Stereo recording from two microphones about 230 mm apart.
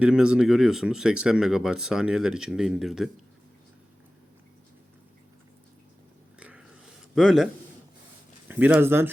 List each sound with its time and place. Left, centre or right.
0.0 s speech: centre
6.4 s a sound: centre
7.2 s speech: centre